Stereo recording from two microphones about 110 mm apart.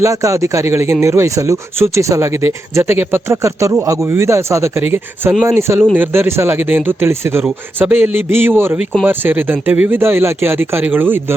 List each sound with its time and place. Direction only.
0.0 s speech: 30° right (ahead or behind)